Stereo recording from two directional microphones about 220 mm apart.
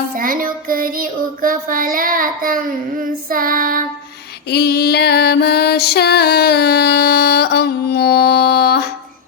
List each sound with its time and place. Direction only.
0.2 s child singing: 40° right (ahead or behind)
4.4 s music: 45° left (ahead or behind)